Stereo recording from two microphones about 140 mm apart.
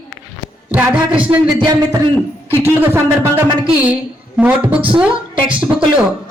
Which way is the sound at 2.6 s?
15° right (ahead or behind).